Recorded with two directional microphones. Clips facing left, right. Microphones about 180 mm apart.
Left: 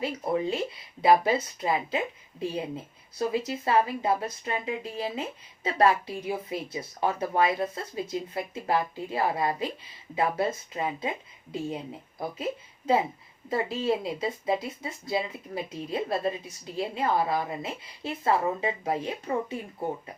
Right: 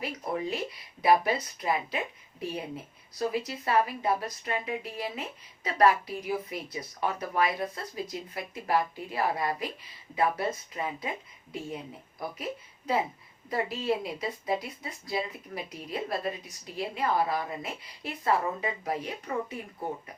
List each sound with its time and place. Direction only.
0.0 s speech: 25° left (ahead or behind)
12.4 s a woman's voice: 25° left (ahead or behind)